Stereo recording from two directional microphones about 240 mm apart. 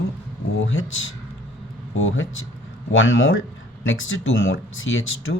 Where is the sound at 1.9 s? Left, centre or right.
Left.